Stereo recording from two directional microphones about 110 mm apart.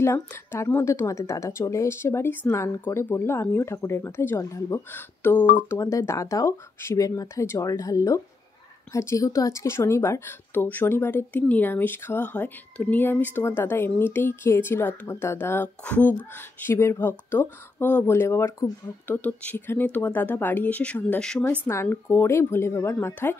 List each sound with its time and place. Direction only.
0.0 s speech: 25° left (ahead or behind)
16.6 s speech: 25° left (ahead or behind); by 21.5 s 10° left (ahead or behind)
21.6 s speech: 20° left (ahead or behind)